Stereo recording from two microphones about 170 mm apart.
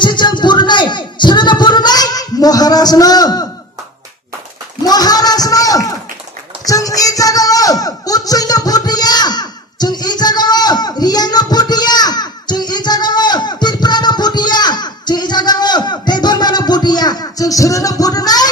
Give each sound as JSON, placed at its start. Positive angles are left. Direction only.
{"t": 0.0, "sound": "music", "side_deg": 25}
{"t": 4.8, "sound": "a man's voice", "side_deg": 25}
{"t": 6.7, "sound": "a sound", "side_deg": 20}